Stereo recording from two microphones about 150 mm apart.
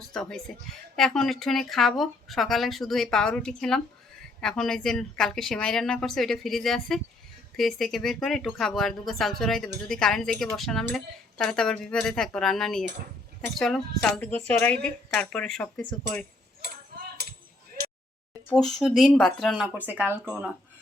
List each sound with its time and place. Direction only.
0.0 s a woman's voice: 5° left (ahead or behind)
16.9 s music: 90° right
18.5 s a woman's voice: centre (ahead or behind)
19.6 s speech: 10° right (ahead or behind)